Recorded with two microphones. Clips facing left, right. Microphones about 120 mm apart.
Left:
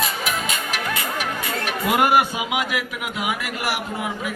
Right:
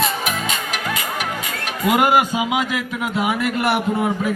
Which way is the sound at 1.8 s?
20° right (ahead or behind).